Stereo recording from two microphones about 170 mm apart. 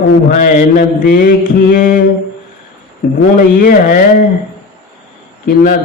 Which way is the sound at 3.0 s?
70° left (ahead or behind).